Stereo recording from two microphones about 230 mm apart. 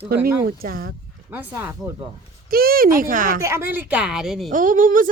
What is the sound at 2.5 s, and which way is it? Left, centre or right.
Speech, right.